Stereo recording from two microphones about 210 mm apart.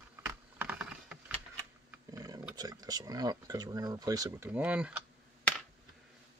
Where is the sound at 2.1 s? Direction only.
15° right (ahead or behind).